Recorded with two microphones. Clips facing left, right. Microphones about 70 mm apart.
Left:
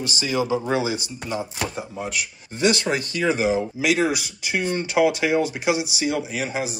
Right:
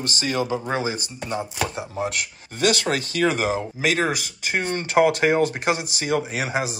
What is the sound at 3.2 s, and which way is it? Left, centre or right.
Speech, right.